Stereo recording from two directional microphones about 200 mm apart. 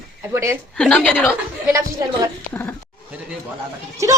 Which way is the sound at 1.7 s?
15° right (ahead or behind).